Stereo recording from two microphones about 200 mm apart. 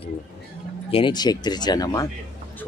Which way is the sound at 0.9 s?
25° left (ahead or behind).